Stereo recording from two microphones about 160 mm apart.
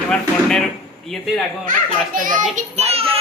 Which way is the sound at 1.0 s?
Centre (ahead or behind).